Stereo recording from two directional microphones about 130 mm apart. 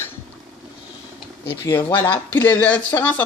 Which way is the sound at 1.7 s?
25° left (ahead or behind).